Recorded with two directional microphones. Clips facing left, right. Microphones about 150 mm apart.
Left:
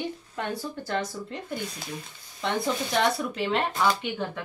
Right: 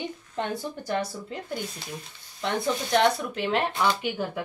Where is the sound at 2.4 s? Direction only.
Centre (ahead or behind).